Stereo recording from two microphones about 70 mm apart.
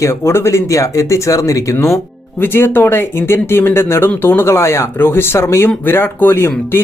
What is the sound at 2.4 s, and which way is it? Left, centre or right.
Speech, left.